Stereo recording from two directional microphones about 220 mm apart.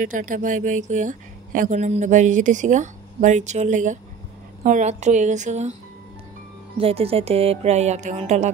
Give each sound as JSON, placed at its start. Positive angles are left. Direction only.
{"t": 0.0, "sound": "a woman's voice", "side_deg": -35}
{"t": 6.8, "sound": "speech", "side_deg": -25}